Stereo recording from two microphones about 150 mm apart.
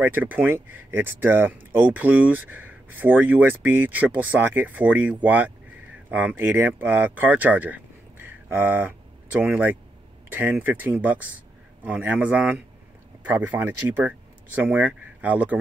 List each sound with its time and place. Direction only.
0.0 s speech: 10° right (ahead or behind)